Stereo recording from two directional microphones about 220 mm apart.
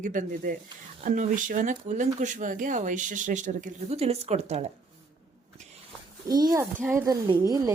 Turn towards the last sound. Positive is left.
turn(degrees=-15)  # may be behind; listen again after turning